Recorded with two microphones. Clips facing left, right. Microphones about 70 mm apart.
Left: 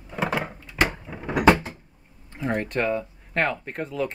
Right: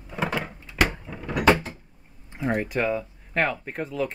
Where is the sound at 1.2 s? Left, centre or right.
Left.